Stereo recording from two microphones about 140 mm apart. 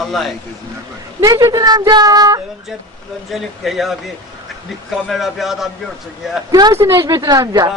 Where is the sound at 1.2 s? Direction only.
20° right (ahead or behind).